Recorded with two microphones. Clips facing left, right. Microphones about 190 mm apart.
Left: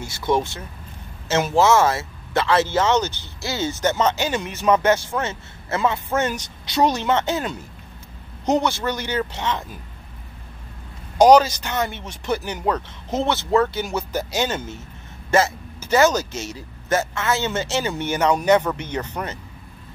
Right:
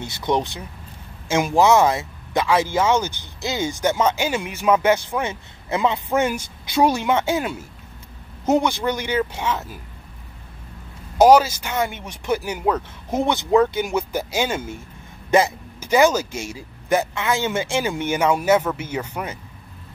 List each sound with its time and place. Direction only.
0.0 s speech: 20° right (ahead or behind)
11.1 s speech: 5° right (ahead or behind)